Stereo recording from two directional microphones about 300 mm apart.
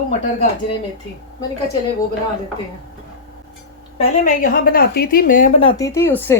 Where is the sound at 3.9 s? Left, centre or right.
Left.